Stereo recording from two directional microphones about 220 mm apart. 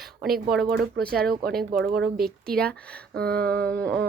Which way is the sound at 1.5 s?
Centre (ahead or behind).